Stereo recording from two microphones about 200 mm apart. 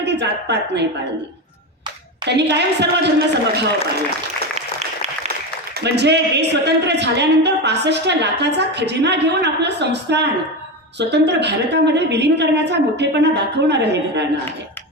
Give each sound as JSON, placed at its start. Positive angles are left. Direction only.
{"t": 0.0, "sound": "a woman's voice", "side_deg": -60}
{"t": 2.2, "sound": "speech", "side_deg": -60}
{"t": 5.8, "sound": "speech", "side_deg": -60}